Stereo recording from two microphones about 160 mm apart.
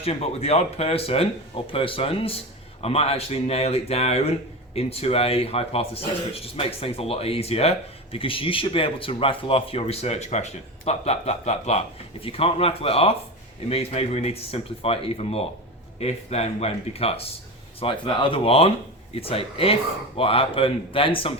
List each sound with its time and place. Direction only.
0.0 s speech: 40° left (ahead or behind)